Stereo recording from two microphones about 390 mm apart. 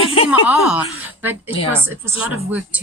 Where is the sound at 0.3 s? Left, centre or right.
Centre.